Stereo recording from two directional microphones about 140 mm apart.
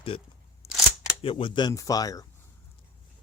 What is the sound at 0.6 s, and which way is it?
Single-lens reflex camera, 45° left (ahead or behind).